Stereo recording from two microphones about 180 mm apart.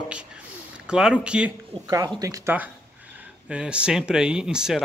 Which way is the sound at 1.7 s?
20° right (ahead or behind).